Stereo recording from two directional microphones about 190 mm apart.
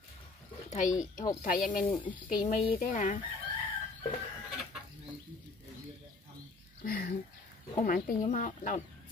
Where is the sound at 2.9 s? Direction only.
45° left (ahead or behind).